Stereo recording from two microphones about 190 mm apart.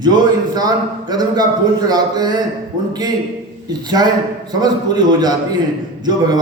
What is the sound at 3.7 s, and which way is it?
A man's voice, 20° right (ahead or behind).